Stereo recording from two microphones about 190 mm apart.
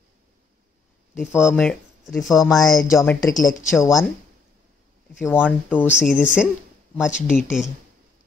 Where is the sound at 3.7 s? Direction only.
Centre (ahead or behind).